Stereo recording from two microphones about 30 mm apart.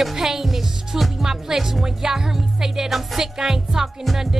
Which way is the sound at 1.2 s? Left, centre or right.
Centre.